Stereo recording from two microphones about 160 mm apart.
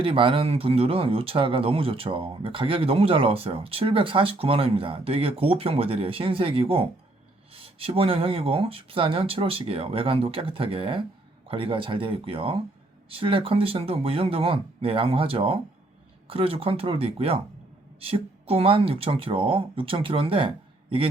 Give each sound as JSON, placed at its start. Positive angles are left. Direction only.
{"t": 0.0, "sound": "speech", "side_deg": -35}